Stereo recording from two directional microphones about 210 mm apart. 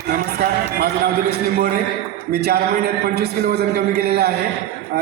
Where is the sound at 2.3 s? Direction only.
50° right (ahead or behind).